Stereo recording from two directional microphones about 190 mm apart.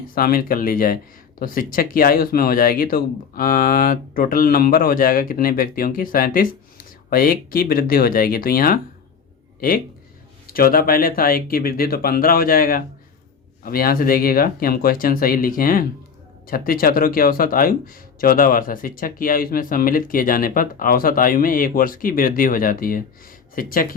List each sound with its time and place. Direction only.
0.1 s speech: 50° left (ahead or behind)